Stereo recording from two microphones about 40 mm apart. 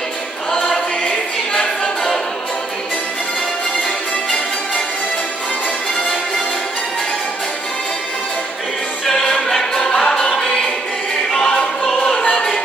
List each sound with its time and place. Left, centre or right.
0.5 s choir: centre
9.0 s choir: centre
11.3 s choir: centre
12.2 s music: left